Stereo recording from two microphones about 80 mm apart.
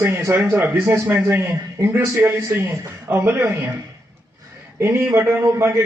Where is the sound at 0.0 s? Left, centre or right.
Right.